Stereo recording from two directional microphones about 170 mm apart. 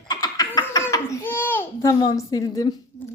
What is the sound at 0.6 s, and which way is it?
A child's voice, 20° left (ahead or behind).